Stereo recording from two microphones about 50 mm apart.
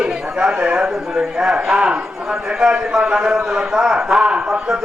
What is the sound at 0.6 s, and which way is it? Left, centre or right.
A man's voice, centre.